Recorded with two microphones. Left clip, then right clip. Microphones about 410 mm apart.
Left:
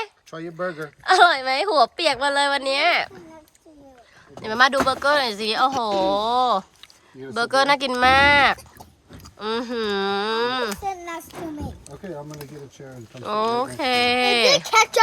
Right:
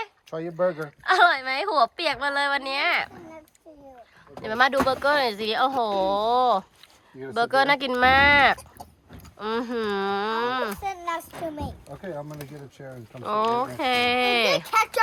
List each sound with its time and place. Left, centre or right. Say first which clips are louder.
0.3 s speech: right 2 dB; centre
1.0 s speech: left 4 dB; centre
4.4 s speech: left 3 dB; centre
13.2 s speech: left 1 dB; centre
14.7 s a child's voice: left 5 dB; centre